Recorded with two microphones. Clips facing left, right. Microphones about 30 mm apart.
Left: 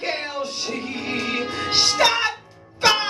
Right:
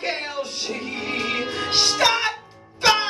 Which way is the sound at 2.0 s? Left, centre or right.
Centre.